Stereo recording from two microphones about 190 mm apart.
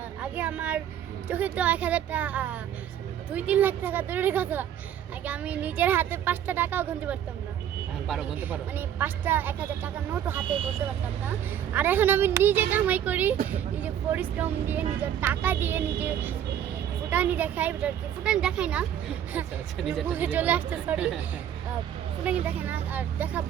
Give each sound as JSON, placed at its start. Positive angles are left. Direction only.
{"t": 0.2, "sound": "a sound", "side_deg": -10}
{"t": 1.3, "sound": "speech", "side_deg": -10}
{"t": 11.7, "sound": "speech", "side_deg": -10}
{"t": 22.2, "sound": "speech", "side_deg": -5}